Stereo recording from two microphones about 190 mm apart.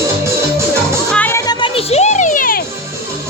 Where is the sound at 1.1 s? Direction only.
10° left (ahead or behind); by 2.6 s 50° left (ahead or behind).